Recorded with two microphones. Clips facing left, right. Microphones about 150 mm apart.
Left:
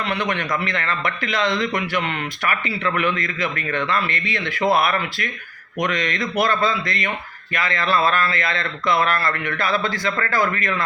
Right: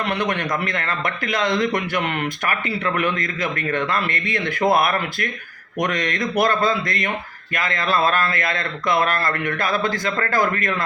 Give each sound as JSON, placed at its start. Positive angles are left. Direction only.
{"t": 0.0, "sound": "a man's voice", "side_deg": -50}